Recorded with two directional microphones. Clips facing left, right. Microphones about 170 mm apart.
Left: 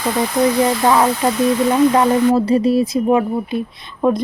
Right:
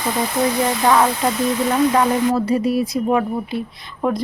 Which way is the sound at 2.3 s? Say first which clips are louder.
Left 4 dB; 30° left (ahead or behind).